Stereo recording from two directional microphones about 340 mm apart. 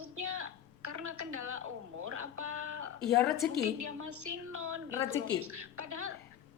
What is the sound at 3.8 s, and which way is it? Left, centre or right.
Speech, right.